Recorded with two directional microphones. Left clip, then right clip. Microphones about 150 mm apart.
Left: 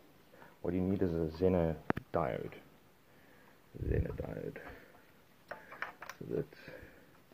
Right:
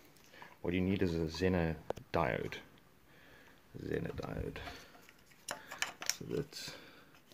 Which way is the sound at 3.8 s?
25° right (ahead or behind).